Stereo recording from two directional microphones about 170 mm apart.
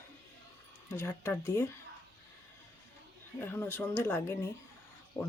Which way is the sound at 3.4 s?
10° left (ahead or behind).